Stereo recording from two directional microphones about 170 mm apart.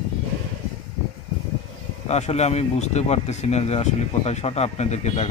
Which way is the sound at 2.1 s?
40° left (ahead or behind).